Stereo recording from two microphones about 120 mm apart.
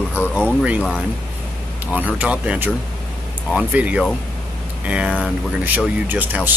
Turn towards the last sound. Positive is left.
turn(degrees=-15)  # may be behind; listen again after turning